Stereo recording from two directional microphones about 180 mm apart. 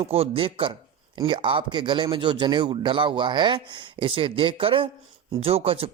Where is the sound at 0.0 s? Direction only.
35° right (ahead or behind).